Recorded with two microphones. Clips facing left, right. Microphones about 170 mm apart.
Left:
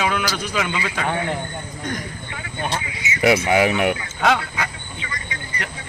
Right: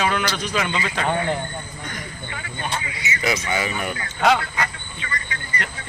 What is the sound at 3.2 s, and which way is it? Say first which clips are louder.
Speech: left 8 dB; 65° left (ahead or behind).